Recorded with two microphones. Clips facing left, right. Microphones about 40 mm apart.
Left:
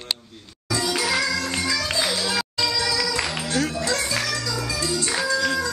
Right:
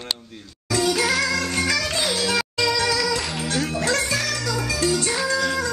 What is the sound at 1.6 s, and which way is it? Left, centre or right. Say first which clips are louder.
Music: right 1 dB; right.